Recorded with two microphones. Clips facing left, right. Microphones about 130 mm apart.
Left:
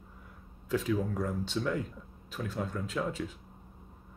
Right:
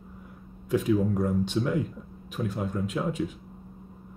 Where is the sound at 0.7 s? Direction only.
15° right (ahead or behind).